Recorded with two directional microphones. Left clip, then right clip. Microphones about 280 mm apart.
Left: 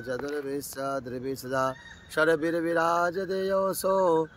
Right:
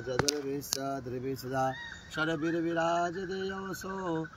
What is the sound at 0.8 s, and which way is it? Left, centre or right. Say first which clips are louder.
Speech: left 4 dB; centre.